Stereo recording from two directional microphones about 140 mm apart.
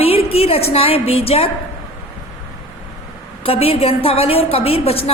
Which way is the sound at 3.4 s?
45° left (ahead or behind).